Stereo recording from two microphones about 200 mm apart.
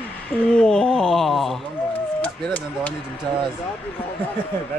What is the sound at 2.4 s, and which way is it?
Speech, 5° left (ahead or behind).